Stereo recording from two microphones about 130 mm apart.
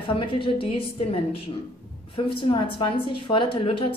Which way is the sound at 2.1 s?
40° left (ahead or behind).